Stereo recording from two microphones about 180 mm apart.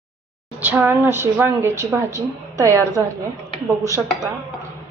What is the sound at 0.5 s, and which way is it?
A woman's voice, 10° right (ahead or behind).